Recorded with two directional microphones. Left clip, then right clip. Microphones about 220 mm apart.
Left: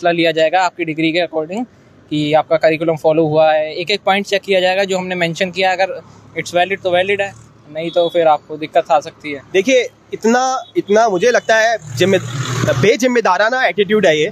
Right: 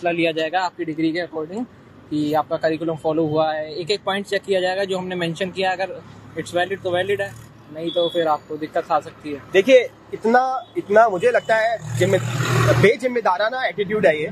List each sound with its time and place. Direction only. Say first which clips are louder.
0.0 s speech: left 7 dB; 50° left (ahead or behind)
9.5 s speech: even; 30° left (ahead or behind)
10.2 s speech: left 3 dB; 45° left (ahead or behind)